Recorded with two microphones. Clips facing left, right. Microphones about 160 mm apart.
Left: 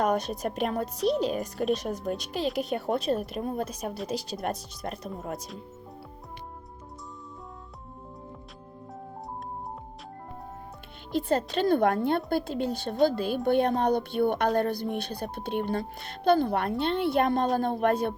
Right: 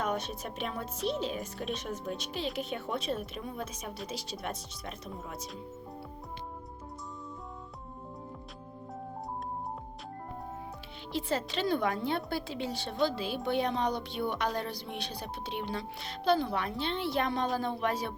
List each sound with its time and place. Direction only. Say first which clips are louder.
0.0 s a woman's voice: left 7 dB; 40° left (ahead or behind)
3.6 s a woman's voice: left 7 dB; 35° left (ahead or behind)
11.1 s a woman's voice: left 6 dB; 50° left (ahead or behind)